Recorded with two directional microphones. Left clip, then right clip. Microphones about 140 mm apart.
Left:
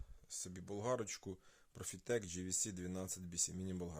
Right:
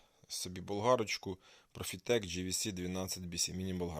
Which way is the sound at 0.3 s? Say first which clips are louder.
Right 8 dB; 10° right (ahead or behind).